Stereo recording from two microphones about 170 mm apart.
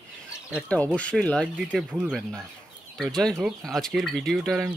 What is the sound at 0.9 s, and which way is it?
Speech, 5° left (ahead or behind).